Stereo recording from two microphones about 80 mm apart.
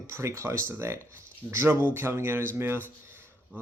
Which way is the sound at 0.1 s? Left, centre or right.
Right.